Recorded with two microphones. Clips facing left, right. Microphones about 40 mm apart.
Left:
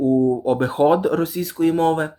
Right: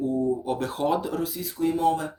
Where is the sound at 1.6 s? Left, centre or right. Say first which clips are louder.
Left 5 dB; left.